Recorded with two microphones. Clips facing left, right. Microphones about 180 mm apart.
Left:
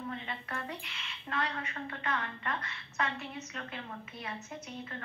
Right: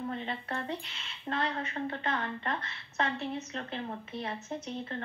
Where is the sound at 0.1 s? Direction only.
35° right (ahead or behind).